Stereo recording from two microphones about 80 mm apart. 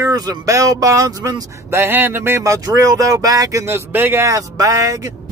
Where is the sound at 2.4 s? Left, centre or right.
Right.